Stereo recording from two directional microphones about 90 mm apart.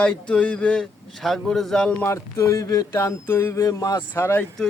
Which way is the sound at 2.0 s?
35° left (ahead or behind).